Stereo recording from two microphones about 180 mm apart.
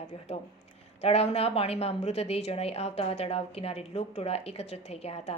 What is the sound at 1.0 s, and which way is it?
A woman's voice, 35° left (ahead or behind).